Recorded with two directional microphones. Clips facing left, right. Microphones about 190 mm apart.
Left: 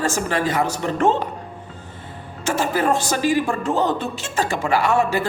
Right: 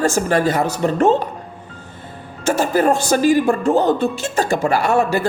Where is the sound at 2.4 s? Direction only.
40° right (ahead or behind).